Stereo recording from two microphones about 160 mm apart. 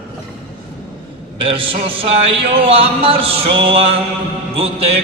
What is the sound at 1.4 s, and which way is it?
A man's voice, 35° right (ahead or behind).